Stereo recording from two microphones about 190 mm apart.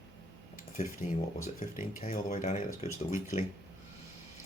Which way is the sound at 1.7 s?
45° left (ahead or behind).